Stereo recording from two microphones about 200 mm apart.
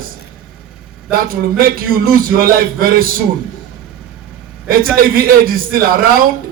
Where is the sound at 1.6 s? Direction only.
45° right (ahead or behind).